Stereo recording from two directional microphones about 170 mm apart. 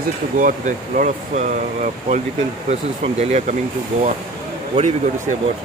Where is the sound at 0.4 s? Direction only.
50° right (ahead or behind).